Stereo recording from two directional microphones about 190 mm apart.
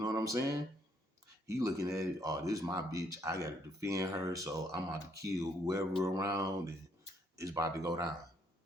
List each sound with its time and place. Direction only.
0.0 s speech: 20° right (ahead or behind)